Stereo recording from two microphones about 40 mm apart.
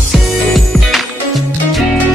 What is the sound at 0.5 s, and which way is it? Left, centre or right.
Music, centre.